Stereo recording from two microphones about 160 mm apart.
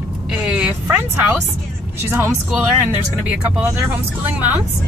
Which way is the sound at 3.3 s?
10° right (ahead or behind).